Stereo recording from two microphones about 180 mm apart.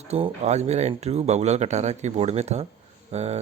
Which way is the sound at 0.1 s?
35° right (ahead or behind).